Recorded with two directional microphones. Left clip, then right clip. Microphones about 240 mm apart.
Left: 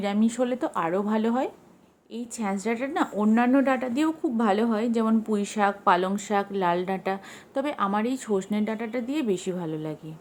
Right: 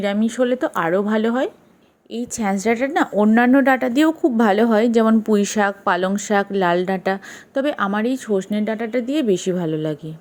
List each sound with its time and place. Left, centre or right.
0.0 s a woman's voice: centre